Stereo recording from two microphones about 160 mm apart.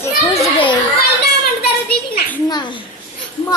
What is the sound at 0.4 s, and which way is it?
Children playing, 30° left (ahead or behind).